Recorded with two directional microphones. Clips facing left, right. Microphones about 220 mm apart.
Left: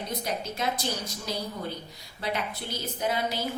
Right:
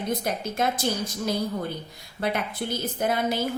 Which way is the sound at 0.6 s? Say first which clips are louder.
Right 5 dB; 50° right (ahead or behind).